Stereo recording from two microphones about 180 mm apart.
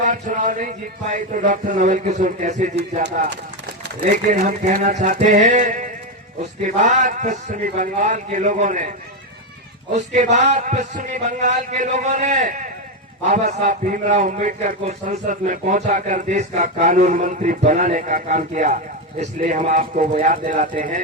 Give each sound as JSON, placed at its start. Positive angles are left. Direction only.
{"t": 0.0, "sound": "a man's voice", "side_deg": -45}
{"t": 4.0, "sound": "a man's voice", "side_deg": -50}
{"t": 9.9, "sound": "a man's voice", "side_deg": -40}